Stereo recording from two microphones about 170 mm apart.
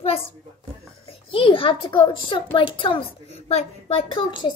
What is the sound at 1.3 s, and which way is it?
A child's voice, 30° left (ahead or behind).